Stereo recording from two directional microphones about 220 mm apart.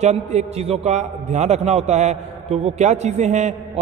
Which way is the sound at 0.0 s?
30° right (ahead or behind).